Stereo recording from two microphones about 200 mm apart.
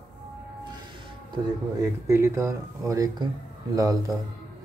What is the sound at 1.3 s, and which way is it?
Speech, 15° right (ahead or behind).